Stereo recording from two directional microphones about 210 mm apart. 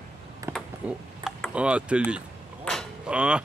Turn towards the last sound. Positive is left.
turn(degrees=-5)  # may be behind; listen again after turning